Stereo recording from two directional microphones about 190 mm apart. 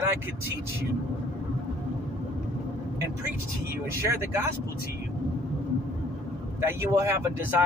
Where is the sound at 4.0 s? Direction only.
15° right (ahead or behind).